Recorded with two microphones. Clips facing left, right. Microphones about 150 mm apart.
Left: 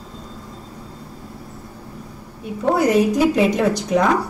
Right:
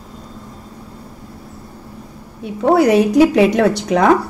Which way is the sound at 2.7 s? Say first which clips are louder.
Right 5 dB; 70° right (ahead or behind).